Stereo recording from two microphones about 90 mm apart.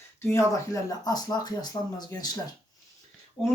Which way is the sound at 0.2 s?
30° left (ahead or behind).